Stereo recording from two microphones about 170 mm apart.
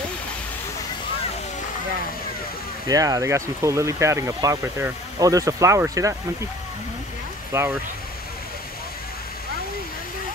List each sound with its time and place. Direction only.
2.9 s speech: 20° right (ahead or behind)
7.5 s speech: 15° right (ahead or behind)